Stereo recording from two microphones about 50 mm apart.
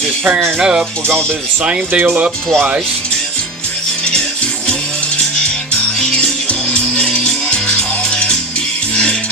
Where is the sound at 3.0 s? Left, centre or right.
Centre.